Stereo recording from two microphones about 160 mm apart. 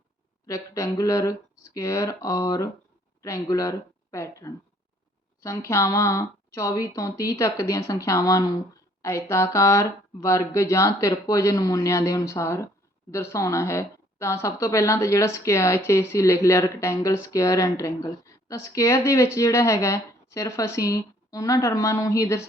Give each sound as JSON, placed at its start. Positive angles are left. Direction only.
{"t": 0.4, "sound": "speech", "side_deg": 20}
{"t": 9.0, "sound": "a sound", "side_deg": 20}
{"t": 9.3, "sound": "speech", "side_deg": 20}